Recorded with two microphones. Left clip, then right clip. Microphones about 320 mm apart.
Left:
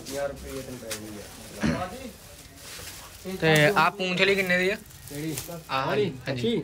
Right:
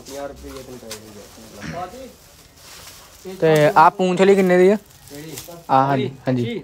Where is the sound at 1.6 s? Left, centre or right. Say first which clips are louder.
Left 4 dB; centre.